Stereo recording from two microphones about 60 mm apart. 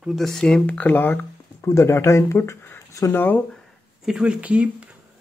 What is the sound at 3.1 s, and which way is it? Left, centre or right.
Speech, left.